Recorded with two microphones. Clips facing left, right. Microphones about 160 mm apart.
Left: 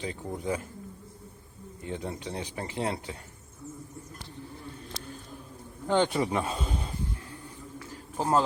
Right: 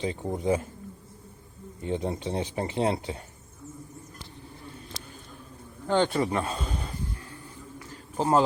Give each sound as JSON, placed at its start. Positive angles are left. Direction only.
{"t": 0.0, "sound": "speech", "side_deg": -20}
{"t": 1.8, "sound": "speech", "side_deg": -25}
{"t": 5.9, "sound": "speech", "side_deg": 15}
{"t": 8.1, "sound": "a man's voice", "side_deg": -5}